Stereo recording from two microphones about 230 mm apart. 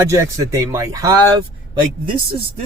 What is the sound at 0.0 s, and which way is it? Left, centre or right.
Speech, centre.